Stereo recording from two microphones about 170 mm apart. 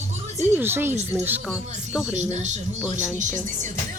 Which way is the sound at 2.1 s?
45° right (ahead or behind).